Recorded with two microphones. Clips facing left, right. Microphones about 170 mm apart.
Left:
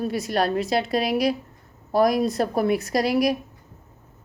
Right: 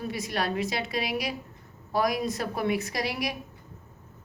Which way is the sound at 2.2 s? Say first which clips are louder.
Left 7 dB; 35° left (ahead or behind).